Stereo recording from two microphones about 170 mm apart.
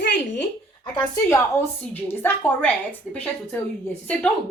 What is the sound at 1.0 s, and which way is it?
A woman's voice, 10° left (ahead or behind).